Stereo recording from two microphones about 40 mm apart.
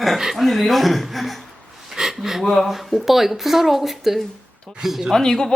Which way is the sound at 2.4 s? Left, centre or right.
Centre.